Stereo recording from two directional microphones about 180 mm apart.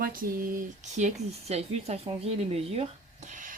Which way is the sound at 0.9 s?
40° right (ahead or behind).